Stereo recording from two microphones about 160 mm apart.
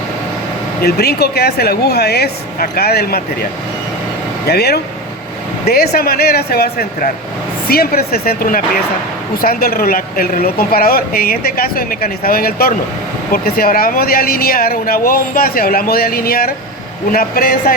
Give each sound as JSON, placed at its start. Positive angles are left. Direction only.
{"t": 0.8, "sound": "a woman's voice", "side_deg": 85}
{"t": 4.4, "sound": "a woman's voice", "side_deg": 80}